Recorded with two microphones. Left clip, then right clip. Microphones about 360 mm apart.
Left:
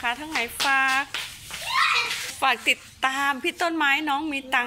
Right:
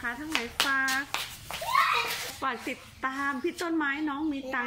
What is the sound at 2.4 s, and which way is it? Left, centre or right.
A woman's voice, centre.